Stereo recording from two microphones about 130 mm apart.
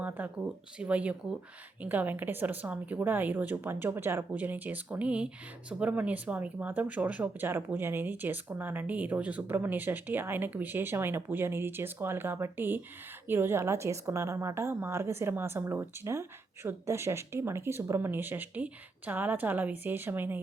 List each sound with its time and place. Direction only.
0.0 s a woman's voice: 15° right (ahead or behind)